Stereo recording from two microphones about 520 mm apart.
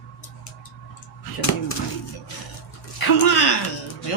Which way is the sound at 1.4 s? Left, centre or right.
Left.